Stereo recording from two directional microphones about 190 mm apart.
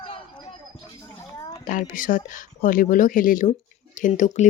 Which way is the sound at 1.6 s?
45° left (ahead or behind).